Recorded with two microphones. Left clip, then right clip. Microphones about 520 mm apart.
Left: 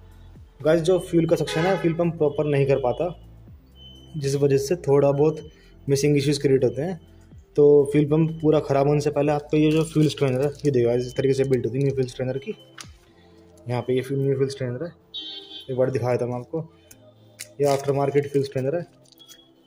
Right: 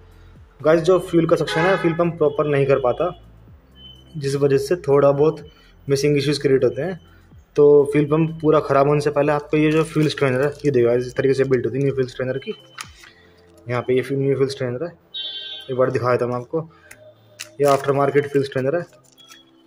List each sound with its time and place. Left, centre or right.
0.6 s speech: left
4.2 s speech: left